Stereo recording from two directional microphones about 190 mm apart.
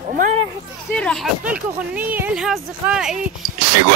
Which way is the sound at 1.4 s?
5° right (ahead or behind).